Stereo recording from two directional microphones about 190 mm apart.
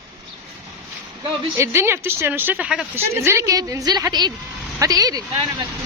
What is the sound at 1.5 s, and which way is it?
A woman's voice, 15° right (ahead or behind).